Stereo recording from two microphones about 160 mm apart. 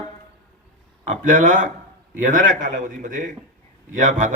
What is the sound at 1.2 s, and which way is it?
A man's voice, 55° right (ahead or behind).